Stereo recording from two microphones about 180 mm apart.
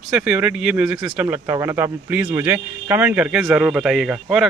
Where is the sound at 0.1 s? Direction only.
10° right (ahead or behind).